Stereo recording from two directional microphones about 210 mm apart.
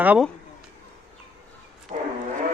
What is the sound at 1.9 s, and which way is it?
Foghorn, 35° right (ahead or behind).